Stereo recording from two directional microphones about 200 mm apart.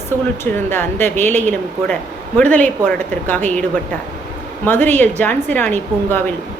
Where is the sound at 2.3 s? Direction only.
5° left (ahead or behind).